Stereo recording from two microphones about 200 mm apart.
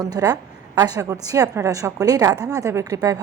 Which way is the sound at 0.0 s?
20° right (ahead or behind).